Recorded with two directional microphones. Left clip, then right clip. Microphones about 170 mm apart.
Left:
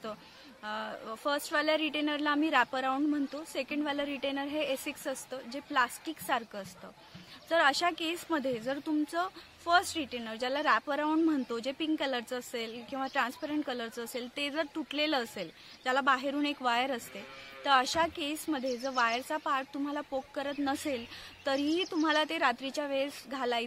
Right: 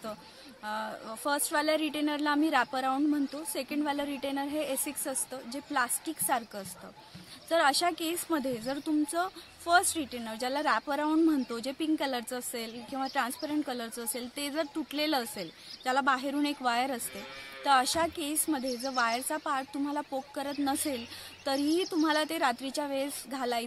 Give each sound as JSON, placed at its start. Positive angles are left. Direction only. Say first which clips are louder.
{"t": 0.7, "sound": "speech", "louder": "right 2 dB", "side_deg": 15}